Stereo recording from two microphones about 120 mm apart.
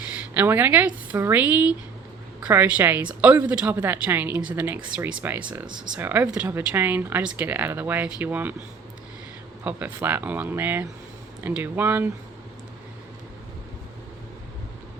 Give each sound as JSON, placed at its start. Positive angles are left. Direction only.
{"t": 0.3, "sound": "a woman's voice", "side_deg": -15}
{"t": 9.6, "sound": "a woman's voice", "side_deg": -15}